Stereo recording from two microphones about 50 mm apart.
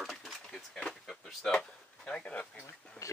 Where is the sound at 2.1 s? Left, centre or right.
Left.